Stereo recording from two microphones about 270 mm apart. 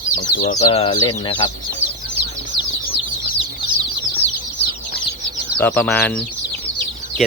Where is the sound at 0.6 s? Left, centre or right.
Centre.